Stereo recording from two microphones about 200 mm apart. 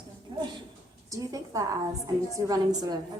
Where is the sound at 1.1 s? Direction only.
15° right (ahead or behind).